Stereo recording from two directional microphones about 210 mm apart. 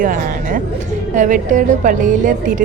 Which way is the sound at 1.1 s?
35° right (ahead or behind).